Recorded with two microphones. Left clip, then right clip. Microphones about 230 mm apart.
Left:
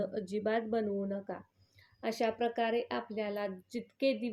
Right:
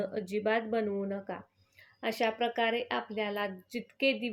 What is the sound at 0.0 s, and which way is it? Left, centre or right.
Speech, right.